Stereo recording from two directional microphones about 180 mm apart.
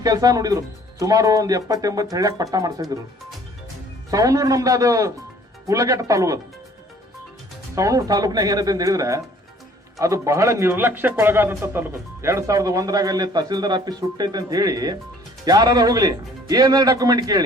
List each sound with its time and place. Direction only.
0.0 s speech: 20° right (ahead or behind)
4.1 s speech: 20° right (ahead or behind)
7.8 s speech: 20° right (ahead or behind)